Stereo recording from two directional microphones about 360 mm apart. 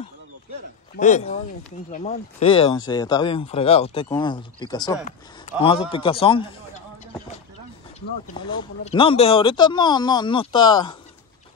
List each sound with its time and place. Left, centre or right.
0.9 s speech: centre
8.4 s speech: centre